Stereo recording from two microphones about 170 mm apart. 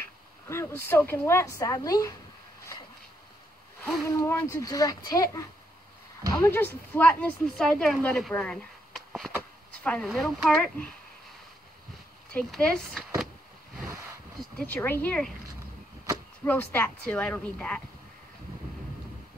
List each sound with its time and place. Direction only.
0.5 s speech: 15° left (ahead or behind)
4.0 s speech: 20° left (ahead or behind)
12.3 s speech: 5° left (ahead or behind)
14.6 s speech: 10° left (ahead or behind)
16.4 s speech: 10° left (ahead or behind)